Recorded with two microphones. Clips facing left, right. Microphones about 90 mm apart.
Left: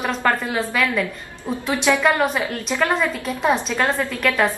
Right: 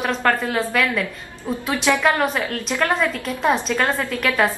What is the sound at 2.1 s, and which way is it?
Speech, 5° left (ahead or behind).